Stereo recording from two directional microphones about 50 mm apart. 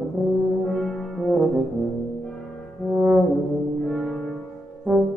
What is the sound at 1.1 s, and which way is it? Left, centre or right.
Brass instrument, centre.